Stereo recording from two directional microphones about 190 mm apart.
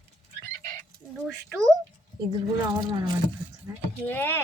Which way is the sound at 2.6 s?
20° right (ahead or behind).